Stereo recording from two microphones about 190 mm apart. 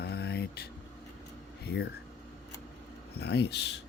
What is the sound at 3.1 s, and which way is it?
Speech, 60° left (ahead or behind).